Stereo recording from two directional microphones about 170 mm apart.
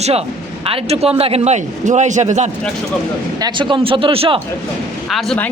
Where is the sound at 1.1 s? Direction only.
35° right (ahead or behind).